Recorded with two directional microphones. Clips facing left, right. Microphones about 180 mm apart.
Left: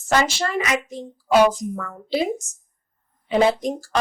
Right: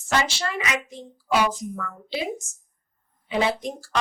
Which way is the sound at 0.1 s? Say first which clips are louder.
Left 4 dB; 45° left (ahead or behind).